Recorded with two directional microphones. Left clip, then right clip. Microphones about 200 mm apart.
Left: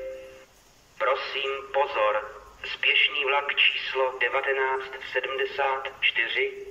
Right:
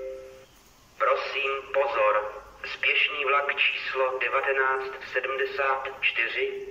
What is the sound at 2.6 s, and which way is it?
A man's voice, 20° left (ahead or behind).